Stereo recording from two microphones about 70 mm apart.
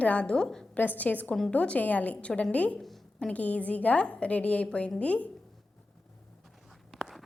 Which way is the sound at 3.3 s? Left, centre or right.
Left.